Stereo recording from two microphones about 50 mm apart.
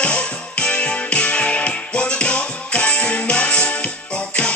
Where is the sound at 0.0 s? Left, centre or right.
Left.